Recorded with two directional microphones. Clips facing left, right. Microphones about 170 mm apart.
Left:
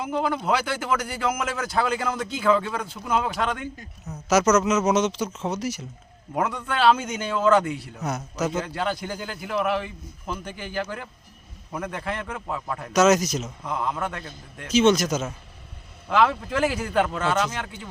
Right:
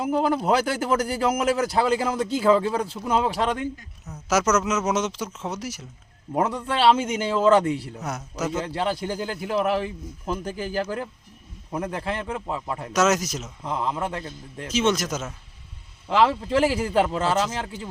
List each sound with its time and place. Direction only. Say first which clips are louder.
0.0 s a man's voice: right 3 dB; 40° right (ahead or behind)
4.1 s speech: left 3 dB; 5° left (ahead or behind)
4.5 s speech: left 3 dB; 5° right (ahead or behind)
6.3 s a man's voice: right 2 dB; 35° right (ahead or behind)
8.0 s speech: left 4 dB; 5° right (ahead or behind)
8.5 s a man's voice: right 1 dB; 30° right (ahead or behind)
12.9 s speech: left 3 dB; centre (ahead or behind)
13.7 s a man's voice: right 2 dB; 25° right (ahead or behind)
14.7 s speech: left 4 dB; centre (ahead or behind)
16.0 s a man's voice: right 1 dB; 30° right (ahead or behind)